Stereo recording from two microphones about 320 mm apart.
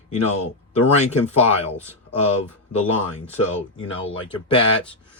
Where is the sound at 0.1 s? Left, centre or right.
Left.